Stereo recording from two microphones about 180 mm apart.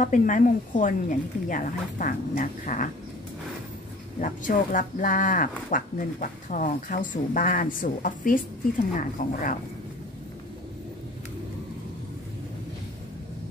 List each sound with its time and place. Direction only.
0.0 s speech: 45° left (ahead or behind)
4.2 s speech: 45° left (ahead or behind)